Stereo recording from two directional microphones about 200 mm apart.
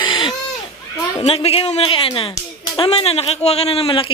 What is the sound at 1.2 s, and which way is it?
Speech, 30° left (ahead or behind).